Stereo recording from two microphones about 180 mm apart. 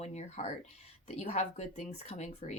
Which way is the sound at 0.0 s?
35° left (ahead or behind).